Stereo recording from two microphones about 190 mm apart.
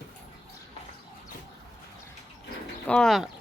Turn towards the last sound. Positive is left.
turn(degrees=0)  # may be behind; listen again after turning